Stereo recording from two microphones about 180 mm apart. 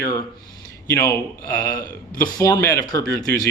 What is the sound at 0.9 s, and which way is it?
A man's voice, 15° left (ahead or behind).